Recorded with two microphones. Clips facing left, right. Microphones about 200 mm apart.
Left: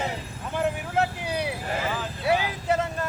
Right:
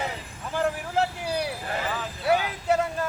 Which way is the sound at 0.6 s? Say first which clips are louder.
Even; centre (ahead or behind).